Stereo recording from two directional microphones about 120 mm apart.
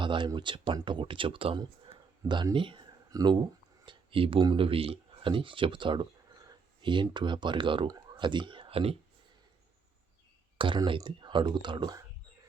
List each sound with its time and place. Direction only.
0.0 s speech: 40° right (ahead or behind)
2.2 s speech: 40° right (ahead or behind)
3.1 s speech: 30° right (ahead or behind)
3.8 s speech: 45° right (ahead or behind)
10.6 s speech: 45° right (ahead or behind)